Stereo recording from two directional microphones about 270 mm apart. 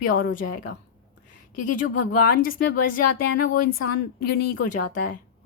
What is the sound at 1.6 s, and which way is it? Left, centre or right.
A woman's voice, left.